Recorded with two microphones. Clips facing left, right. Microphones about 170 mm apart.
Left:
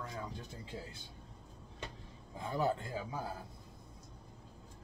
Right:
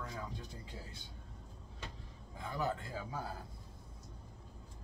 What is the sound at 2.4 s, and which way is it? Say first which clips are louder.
Speech: left 4 dB; 25° left (ahead or behind).